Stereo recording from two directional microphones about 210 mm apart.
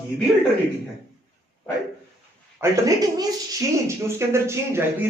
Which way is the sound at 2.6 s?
15° right (ahead or behind).